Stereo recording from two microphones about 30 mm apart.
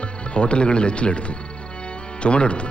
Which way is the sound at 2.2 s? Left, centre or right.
Left.